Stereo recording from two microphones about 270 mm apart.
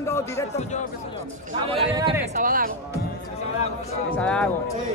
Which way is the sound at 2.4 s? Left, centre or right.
Right.